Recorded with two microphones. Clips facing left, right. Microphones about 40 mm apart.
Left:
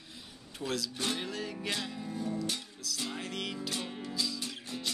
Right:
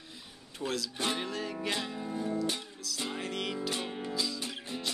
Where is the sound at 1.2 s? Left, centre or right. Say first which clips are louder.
Right 2 dB; centre.